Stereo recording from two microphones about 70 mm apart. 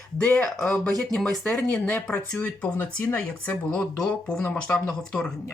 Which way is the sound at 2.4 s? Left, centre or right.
Centre.